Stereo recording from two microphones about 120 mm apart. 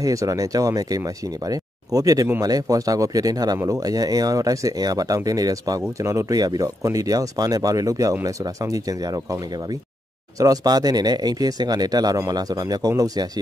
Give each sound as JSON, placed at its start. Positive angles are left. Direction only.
{"t": 0.0, "sound": "speech", "side_deg": -25}
{"t": 10.4, "sound": "speech", "side_deg": -30}